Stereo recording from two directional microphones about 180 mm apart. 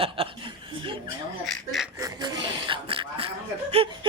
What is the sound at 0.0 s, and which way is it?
Chuckle, 30° right (ahead or behind).